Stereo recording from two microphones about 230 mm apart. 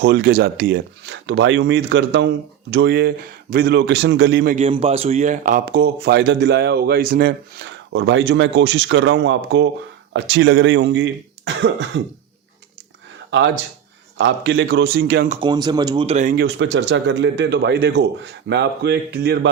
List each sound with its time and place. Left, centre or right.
0.0 s a man's voice: right
4.5 s a man's voice: right
14.2 s a man's voice: right
15.4 s a man's voice: centre; by 19.5 s right